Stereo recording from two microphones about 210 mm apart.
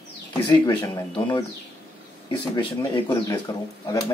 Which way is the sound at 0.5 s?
20° left (ahead or behind).